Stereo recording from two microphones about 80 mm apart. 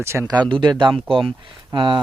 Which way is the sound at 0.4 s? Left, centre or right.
Right.